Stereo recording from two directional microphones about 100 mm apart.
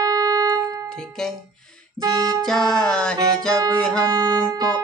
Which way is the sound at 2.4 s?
5° left (ahead or behind).